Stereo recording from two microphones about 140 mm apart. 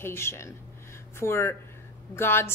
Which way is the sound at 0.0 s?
20° left (ahead or behind).